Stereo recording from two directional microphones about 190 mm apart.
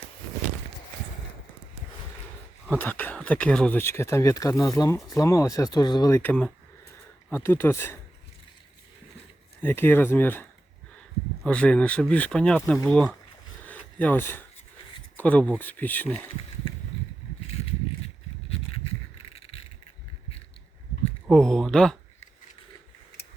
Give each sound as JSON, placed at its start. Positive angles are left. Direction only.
{"t": 2.6, "sound": "speech", "side_deg": 10}
{"t": 9.6, "sound": "speech", "side_deg": 10}
{"t": 11.4, "sound": "speech", "side_deg": 5}
{"t": 13.7, "sound": "a sound", "side_deg": 10}
{"t": 15.2, "sound": "speech", "side_deg": 5}
{"t": 16.6, "sound": "a sound", "side_deg": 30}
{"t": 19.3, "sound": "vehicle", "side_deg": 30}
{"t": 21.2, "sound": "speech", "side_deg": 5}